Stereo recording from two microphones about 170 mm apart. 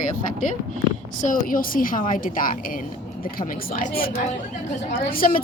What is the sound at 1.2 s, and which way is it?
A woman's voice, 50° left (ahead or behind).